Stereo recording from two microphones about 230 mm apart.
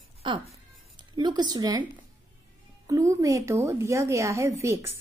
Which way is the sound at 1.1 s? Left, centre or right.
Centre.